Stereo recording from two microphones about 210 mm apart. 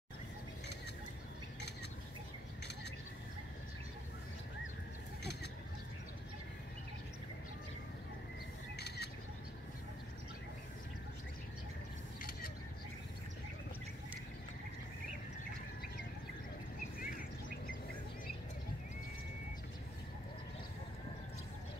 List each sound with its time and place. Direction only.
5.2 s fowl: 50° left (ahead or behind)
8.7 s a sound: 50° left (ahead or behind)
17.0 s bird: 40° left (ahead or behind)